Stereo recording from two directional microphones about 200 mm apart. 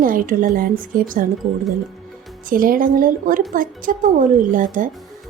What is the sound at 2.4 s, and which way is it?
A woman's voice, 45° right (ahead or behind).